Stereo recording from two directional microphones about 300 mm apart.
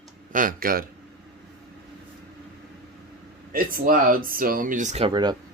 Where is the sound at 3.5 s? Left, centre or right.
Right.